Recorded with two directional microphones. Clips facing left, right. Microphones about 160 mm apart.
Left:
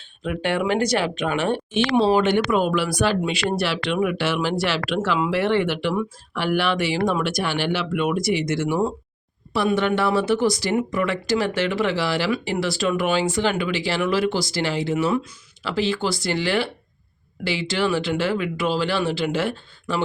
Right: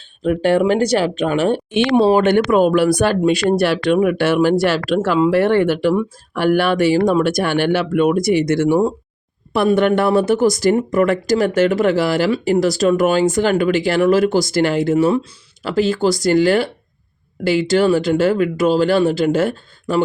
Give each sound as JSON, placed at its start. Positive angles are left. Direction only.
{"t": 0.2, "sound": "speech", "side_deg": -40}
{"t": 1.7, "sound": "speech", "side_deg": -55}
{"t": 9.7, "sound": "speech", "side_deg": -50}
{"t": 14.9, "sound": "speech", "side_deg": -35}